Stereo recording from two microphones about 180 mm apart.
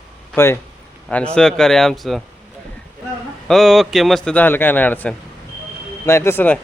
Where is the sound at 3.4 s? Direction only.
Centre (ahead or behind).